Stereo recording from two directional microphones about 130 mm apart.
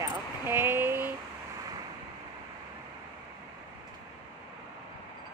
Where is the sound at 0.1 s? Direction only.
15° right (ahead or behind).